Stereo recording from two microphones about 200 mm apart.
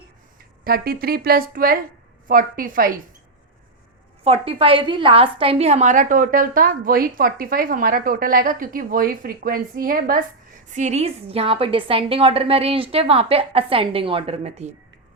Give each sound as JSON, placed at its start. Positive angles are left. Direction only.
{"t": 0.6, "sound": "a woman's voice", "side_deg": -50}
{"t": 4.2, "sound": "a woman's voice", "side_deg": -30}